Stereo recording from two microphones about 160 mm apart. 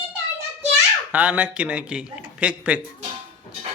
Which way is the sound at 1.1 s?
10° right (ahead or behind).